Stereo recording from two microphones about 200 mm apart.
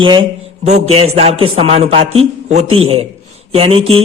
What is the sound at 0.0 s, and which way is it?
A man's voice, 25° right (ahead or behind).